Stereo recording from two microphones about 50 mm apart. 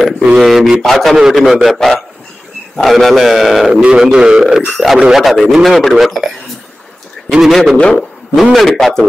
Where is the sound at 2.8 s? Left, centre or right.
Centre.